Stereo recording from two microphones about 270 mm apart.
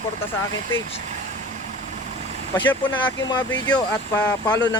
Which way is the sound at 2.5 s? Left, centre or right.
Centre.